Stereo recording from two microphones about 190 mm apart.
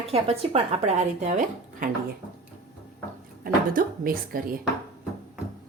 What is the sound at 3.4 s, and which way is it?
Speech, 50° right (ahead or behind).